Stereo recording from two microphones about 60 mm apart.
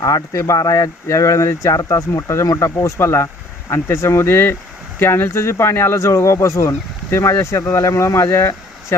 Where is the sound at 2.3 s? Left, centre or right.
Left.